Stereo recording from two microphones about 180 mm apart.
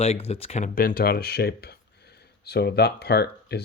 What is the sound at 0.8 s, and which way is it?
Speech, 55° left (ahead or behind).